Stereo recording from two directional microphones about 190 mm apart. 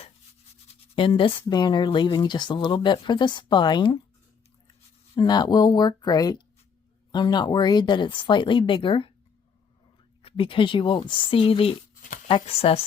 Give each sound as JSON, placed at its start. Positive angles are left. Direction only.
{"t": 0.7, "sound": "speech", "side_deg": 25}
{"t": 5.1, "sound": "speech", "side_deg": 20}
{"t": 10.2, "sound": "speech", "side_deg": 30}